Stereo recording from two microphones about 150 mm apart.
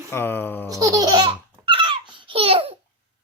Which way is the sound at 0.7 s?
20° right (ahead or behind).